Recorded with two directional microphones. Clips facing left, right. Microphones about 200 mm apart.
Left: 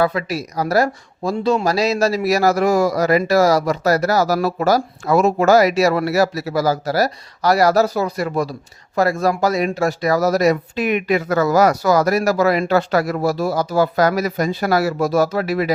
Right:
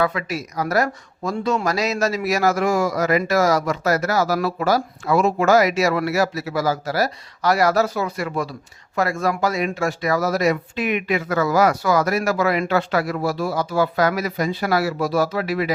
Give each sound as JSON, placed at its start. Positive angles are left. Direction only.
{"t": 0.0, "sound": "speech", "side_deg": 35}